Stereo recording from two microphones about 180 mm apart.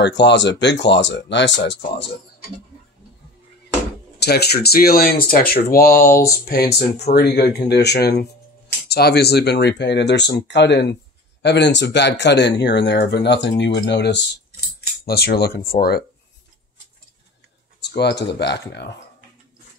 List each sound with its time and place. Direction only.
0.0 s speech: 80° left
4.2 s speech: 65° left (ahead or behind)
17.8 s speech: 70° left (ahead or behind)